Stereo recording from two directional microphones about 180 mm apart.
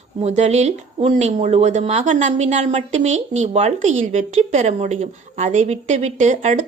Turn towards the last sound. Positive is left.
turn(degrees=-40)  # may be behind; listen again after turning